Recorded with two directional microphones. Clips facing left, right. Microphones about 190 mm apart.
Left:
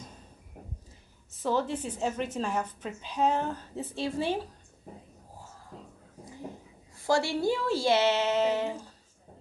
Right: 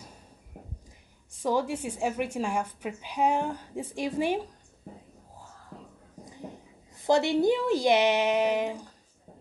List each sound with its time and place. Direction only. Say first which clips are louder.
1.4 s a woman's voice: right 1 dB; 10° right (ahead or behind)
7.0 s a woman's voice: right 4 dB; 20° right (ahead or behind)